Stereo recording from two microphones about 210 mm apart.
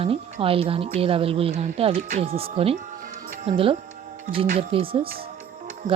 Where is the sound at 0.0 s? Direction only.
25° right (ahead or behind).